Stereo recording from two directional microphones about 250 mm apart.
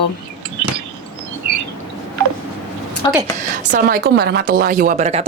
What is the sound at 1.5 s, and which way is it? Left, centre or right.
Bird, right.